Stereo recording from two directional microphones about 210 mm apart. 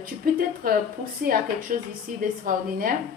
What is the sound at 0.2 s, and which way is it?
Speech, 45° right (ahead or behind).